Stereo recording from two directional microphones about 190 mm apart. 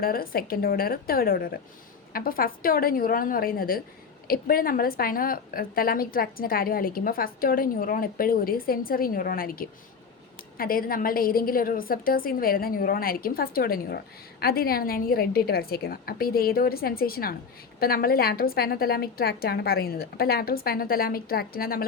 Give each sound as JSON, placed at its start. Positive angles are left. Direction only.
{"t": 0.0, "sound": "a woman's voice", "side_deg": 50}